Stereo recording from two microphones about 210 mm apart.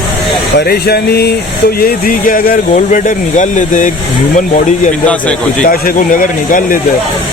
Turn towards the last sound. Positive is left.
turn(degrees=40)  # may be behind; listen again after turning